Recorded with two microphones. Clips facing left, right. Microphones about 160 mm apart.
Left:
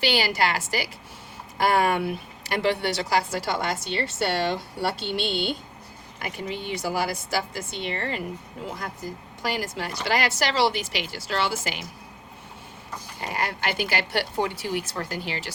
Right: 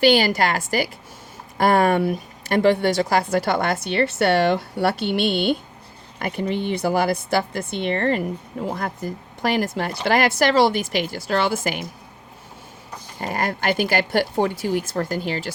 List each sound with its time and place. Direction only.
0.0 s a woman's voice: 50° right (ahead or behind)
13.1 s speech: 45° right (ahead or behind)